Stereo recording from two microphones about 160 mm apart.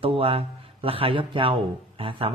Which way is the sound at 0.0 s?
35° right (ahead or behind).